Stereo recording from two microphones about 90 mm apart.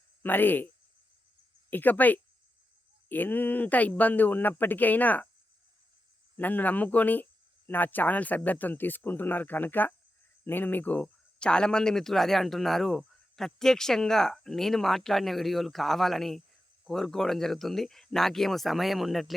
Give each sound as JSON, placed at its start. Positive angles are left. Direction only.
{"t": 0.2, "sound": "speech", "side_deg": 20}
{"t": 1.7, "sound": "speech", "side_deg": 20}
{"t": 6.3, "sound": "speech", "side_deg": 20}